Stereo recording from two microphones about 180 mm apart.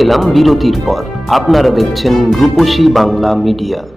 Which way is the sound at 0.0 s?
Centre (ahead or behind).